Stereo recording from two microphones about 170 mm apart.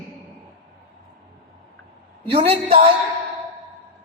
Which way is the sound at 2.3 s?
35° right (ahead or behind).